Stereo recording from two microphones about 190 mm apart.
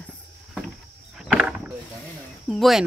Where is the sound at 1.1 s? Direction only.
5° right (ahead or behind).